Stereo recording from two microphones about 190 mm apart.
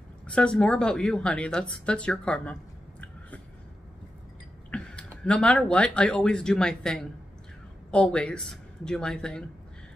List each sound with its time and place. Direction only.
0.3 s a woman's voice: 5° left (ahead or behind)
4.6 s a woman's voice: 5° left (ahead or behind)